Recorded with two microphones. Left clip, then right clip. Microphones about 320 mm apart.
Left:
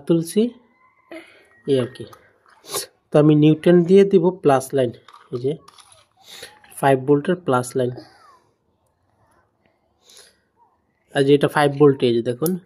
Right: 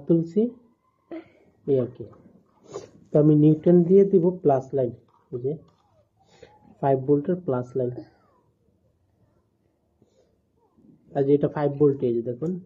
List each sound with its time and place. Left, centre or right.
0.0 s speech: left
1.7 s speech: left
11.1 s speech: left